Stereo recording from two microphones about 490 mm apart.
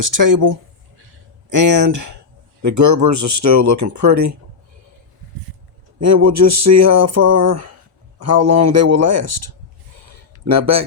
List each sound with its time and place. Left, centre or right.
0.0 s speech: right
6.0 s speech: right
10.4 s speech: right